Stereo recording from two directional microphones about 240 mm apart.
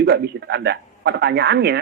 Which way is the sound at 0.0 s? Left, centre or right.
Right.